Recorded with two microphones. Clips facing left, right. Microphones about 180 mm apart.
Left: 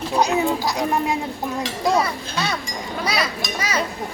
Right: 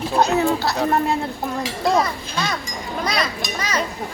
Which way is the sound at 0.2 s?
15° left (ahead or behind).